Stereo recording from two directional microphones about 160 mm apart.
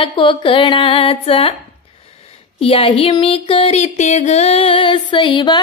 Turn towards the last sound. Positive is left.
turn(degrees=30)  # may be behind; listen again after turning